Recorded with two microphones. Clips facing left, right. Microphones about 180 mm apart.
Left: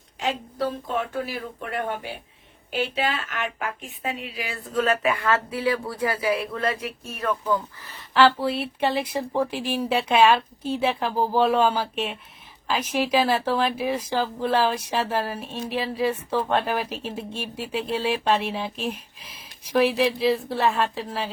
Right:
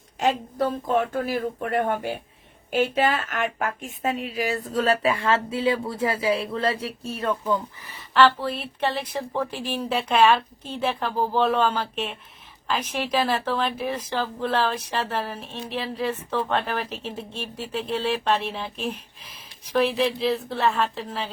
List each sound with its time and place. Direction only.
0.2 s a woman's voice: 45° right (ahead or behind); by 7.9 s 20° right (ahead or behind)
7.9 s speech: 5° left (ahead or behind)